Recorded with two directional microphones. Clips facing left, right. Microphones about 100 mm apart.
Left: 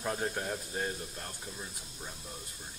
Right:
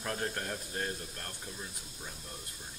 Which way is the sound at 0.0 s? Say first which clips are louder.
Left 2 dB; 10° left (ahead or behind).